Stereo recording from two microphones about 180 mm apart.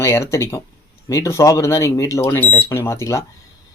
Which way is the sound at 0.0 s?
15° left (ahead or behind).